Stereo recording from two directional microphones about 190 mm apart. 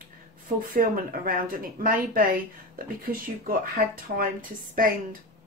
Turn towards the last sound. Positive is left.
turn(degrees=-45)  # may be behind; listen again after turning